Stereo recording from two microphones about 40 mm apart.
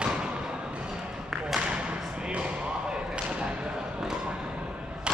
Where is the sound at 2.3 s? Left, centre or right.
Right.